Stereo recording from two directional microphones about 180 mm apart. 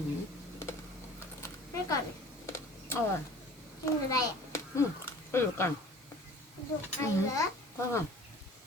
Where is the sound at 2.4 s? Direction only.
15° left (ahead or behind).